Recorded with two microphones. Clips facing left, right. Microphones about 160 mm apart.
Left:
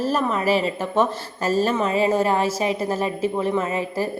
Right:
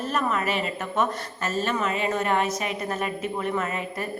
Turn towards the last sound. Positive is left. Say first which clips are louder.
# left 6 dB
turn(degrees=30)  # may be behind; listen again after turning